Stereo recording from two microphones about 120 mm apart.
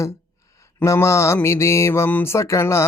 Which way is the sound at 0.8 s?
20° left (ahead or behind).